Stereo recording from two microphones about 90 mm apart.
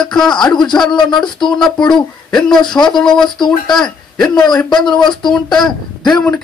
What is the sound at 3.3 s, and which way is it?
Speech, 55° left (ahead or behind).